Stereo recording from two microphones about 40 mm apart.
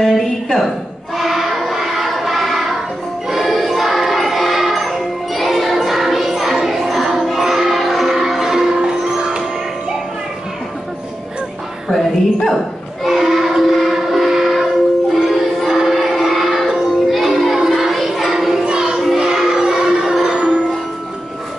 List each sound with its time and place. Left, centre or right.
0.0 s a woman's voice: centre
1.1 s choir: centre
3.3 s music: centre
8.7 s music: centre
11.9 s dog: centre
13.0 s train: centre
15.2 s music: centre
15.9 s a sound: centre
17.1 s music: centre
17.6 s a sound: centre
18.7 s choir: right
19.3 s music: centre